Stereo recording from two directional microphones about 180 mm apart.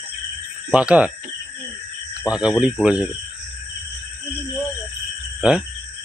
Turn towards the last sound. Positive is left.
turn(degrees=-5)  # may be behind; listen again after turning